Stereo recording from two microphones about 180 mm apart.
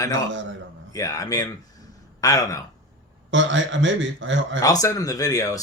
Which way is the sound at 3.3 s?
90° right.